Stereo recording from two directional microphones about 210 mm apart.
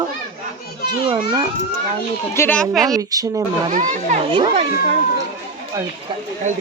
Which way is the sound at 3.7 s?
35° right (ahead or behind).